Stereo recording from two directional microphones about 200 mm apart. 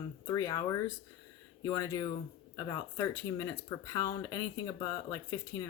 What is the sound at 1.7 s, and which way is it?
Speech, 20° left (ahead or behind).